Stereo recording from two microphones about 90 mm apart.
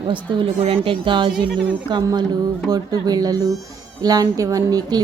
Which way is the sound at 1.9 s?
55° right (ahead or behind).